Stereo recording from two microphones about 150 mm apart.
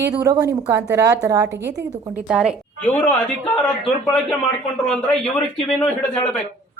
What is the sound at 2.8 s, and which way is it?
Speech, 10° left (ahead or behind).